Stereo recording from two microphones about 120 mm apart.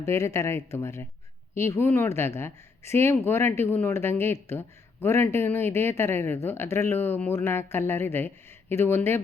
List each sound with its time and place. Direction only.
0.0 s speech: 25° left (ahead or behind)